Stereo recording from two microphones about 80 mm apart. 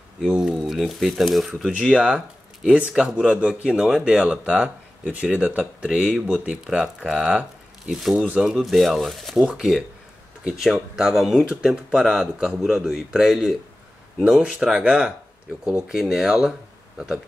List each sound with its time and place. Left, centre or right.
0.2 s speech: centre
0.8 s speech: centre
1.7 s speech: centre
6.0 s speech: centre
6.4 s speech: centre